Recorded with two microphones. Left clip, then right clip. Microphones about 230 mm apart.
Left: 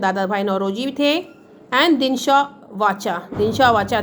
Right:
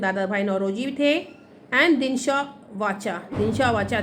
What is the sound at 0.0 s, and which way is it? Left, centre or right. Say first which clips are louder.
A woman's voice: left 4 dB; left.